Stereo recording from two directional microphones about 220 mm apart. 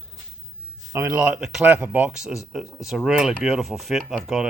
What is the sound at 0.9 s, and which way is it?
Speech, 5° right (ahead or behind).